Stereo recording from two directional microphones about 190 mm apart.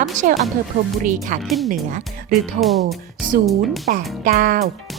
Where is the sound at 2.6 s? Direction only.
Centre (ahead or behind).